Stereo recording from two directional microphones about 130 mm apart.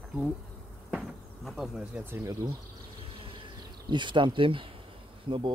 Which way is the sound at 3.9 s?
40° right (ahead or behind).